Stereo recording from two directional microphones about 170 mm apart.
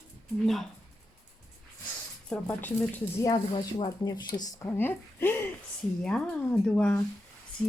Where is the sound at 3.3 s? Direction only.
25° left (ahead or behind).